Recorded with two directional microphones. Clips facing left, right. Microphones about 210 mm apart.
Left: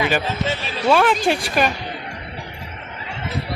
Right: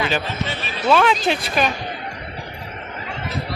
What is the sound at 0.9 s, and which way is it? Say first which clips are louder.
Speech: left 1 dB; 10° left (ahead or behind).